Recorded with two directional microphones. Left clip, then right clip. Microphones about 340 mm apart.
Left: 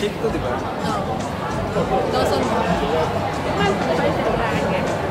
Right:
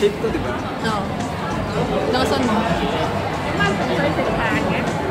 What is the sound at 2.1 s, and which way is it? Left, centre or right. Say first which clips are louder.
Speech: right 1 dB; right.